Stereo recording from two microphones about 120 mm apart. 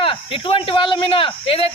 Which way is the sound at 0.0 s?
50° left (ahead or behind).